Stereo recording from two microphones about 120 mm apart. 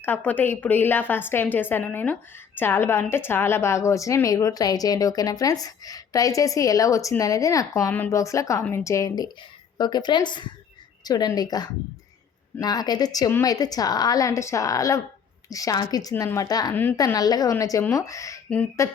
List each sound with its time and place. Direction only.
0.0 s a woman's voice: 15° left (ahead or behind)